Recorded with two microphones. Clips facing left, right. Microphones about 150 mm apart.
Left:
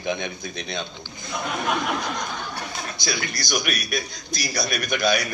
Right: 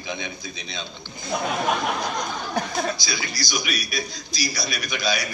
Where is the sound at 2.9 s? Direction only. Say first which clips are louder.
Left 2 dB; 55° left (ahead or behind).